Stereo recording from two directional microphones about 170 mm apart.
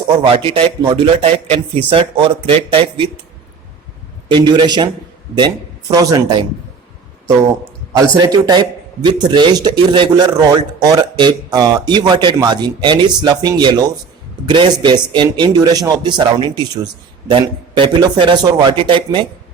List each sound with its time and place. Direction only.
0.3 s speech: 35° right (ahead or behind)
4.3 s a man's voice: 25° right (ahead or behind)
7.9 s a man's voice: 20° right (ahead or behind)